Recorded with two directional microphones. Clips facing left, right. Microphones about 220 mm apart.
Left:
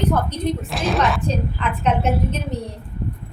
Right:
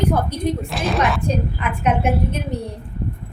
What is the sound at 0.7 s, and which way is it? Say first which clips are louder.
Speech: even; centre (ahead or behind).